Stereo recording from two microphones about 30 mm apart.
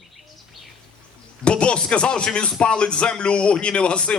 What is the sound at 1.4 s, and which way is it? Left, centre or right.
A man's voice, left.